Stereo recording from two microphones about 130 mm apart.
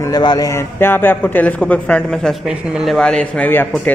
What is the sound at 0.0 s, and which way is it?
A man's voice, 30° left (ahead or behind).